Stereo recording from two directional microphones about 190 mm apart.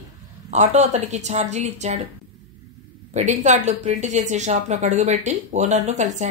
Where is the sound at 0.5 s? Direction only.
35° right (ahead or behind).